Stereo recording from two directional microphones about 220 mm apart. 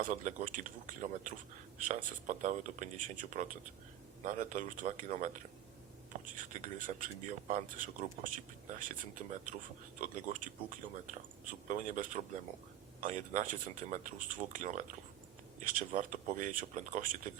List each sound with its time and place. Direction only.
0.0 s speech: 35° right (ahead or behind)